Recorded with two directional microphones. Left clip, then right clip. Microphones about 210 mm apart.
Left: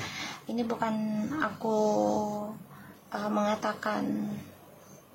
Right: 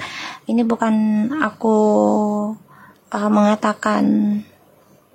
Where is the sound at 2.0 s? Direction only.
55° right (ahead or behind).